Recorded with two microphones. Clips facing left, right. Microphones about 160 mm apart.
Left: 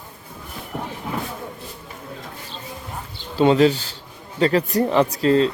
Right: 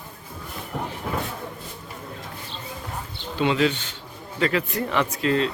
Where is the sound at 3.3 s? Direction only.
35° left (ahead or behind).